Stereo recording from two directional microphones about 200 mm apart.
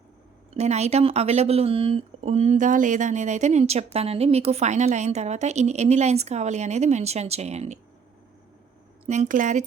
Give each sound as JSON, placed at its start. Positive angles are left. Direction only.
{"t": 0.5, "sound": "speech", "side_deg": -35}
{"t": 9.0, "sound": "speech", "side_deg": -40}